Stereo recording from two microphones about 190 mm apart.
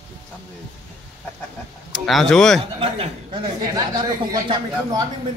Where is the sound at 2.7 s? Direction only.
30° right (ahead or behind).